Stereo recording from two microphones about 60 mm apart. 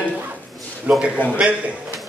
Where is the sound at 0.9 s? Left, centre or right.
Right.